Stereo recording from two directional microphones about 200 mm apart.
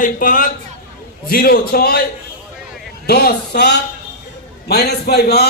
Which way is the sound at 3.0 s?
55° left (ahead or behind).